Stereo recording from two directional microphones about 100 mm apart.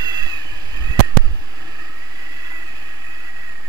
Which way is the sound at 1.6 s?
40° right (ahead or behind).